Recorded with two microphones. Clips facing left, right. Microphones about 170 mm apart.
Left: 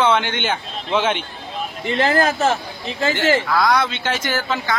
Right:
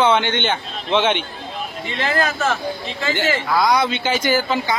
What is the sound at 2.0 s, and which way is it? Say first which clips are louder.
Speech: left 3 dB; 45° left (ahead or behind).